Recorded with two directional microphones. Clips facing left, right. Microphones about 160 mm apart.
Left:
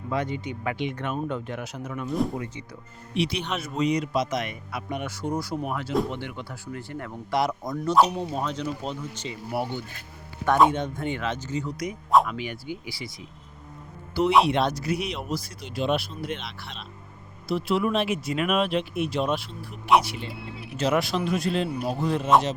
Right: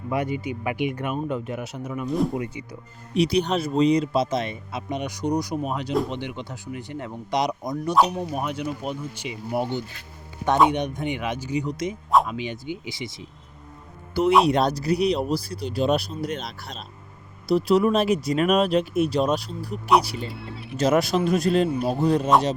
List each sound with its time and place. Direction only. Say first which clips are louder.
0.1 s speech: right 3 dB; 10° right (ahead or behind)
3.2 s a man's voice: right 7 dB; 40° right (ahead or behind); by 13.1 s 20° right (ahead or behind)
14.4 s speech: right 3 dB; 40° right (ahead or behind)